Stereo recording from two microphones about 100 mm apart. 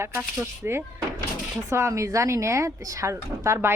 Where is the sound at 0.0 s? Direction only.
25° right (ahead or behind).